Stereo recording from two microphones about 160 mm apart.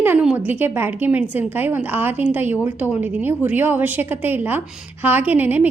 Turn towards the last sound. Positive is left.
turn(degrees=-10)  # may be behind; listen again after turning